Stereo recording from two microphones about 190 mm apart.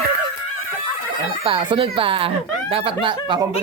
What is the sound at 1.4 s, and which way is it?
Speech, 25° right (ahead or behind).